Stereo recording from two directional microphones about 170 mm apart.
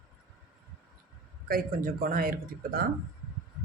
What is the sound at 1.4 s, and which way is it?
Speech, 60° right (ahead or behind).